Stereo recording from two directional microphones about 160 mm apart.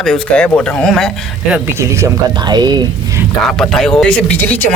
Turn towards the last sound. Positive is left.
turn(degrees=10)  # may be behind; listen again after turning